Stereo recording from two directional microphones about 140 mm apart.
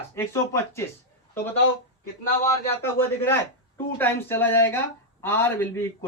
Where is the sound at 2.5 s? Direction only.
15° left (ahead or behind).